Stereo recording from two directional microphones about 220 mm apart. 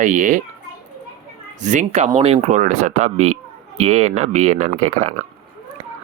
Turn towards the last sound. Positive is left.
turn(degrees=-30)  # may be behind; listen again after turning